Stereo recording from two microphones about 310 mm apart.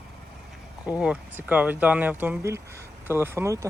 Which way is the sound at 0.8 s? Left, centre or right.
Centre.